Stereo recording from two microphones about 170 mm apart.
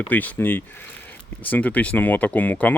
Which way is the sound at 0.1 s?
10° left (ahead or behind).